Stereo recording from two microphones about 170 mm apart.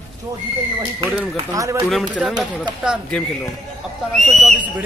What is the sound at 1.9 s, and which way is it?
Speech, centre (ahead or behind).